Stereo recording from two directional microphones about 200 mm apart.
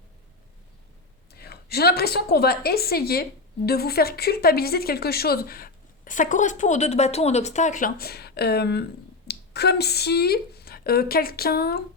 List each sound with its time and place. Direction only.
1.3 s a woman's voice: 50° left (ahead or behind)